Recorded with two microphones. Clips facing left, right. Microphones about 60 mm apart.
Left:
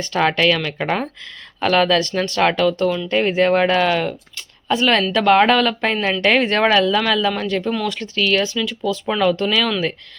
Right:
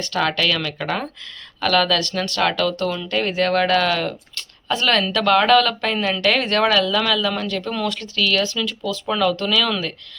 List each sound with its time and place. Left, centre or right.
0.0 s speech: left